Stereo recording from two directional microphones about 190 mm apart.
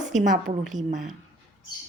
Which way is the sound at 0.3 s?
40° right (ahead or behind).